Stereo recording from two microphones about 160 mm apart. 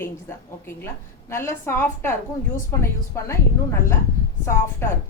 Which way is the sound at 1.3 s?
15° left (ahead or behind).